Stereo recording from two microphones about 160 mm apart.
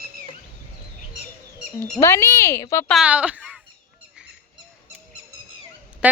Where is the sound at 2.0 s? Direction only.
15° left (ahead or behind).